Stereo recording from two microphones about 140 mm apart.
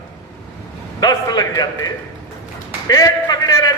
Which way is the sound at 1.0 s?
30° left (ahead or behind).